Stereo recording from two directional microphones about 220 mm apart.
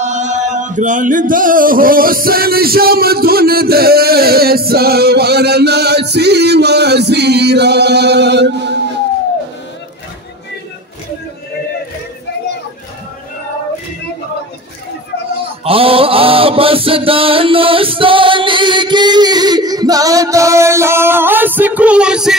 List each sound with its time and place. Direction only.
0.0 s music: 30° right (ahead or behind); by 9.0 s 50° right (ahead or behind)
15.6 s mantra: 25° right (ahead or behind); by 22.3 s 5° right (ahead or behind)